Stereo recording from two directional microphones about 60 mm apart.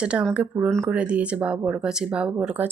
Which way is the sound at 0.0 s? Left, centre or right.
Centre.